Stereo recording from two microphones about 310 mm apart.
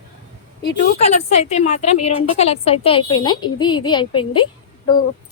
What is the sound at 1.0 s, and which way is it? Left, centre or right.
A woman's voice, left.